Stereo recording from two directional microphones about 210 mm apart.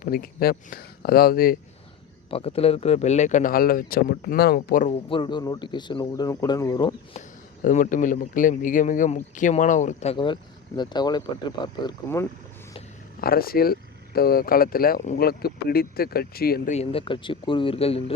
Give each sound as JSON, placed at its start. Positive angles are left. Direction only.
{"t": 0.0, "sound": "speech", "side_deg": 45}
{"t": 2.3, "sound": "speech", "side_deg": 25}
{"t": 5.0, "sound": "speech", "side_deg": 25}
{"t": 7.2, "sound": "speech", "side_deg": 35}
{"t": 13.2, "sound": "speech", "side_deg": 45}
{"t": 16.7, "sound": "speech", "side_deg": 30}